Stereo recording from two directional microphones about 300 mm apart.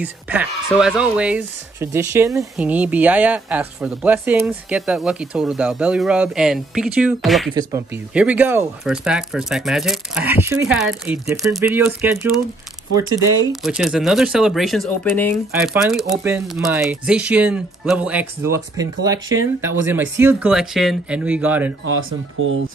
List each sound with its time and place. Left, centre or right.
0.0 s speech: centre
13.5 s speech: centre
22.4 s speech: right